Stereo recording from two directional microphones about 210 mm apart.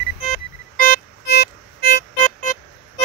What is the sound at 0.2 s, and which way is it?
Music, 40° left (ahead or behind).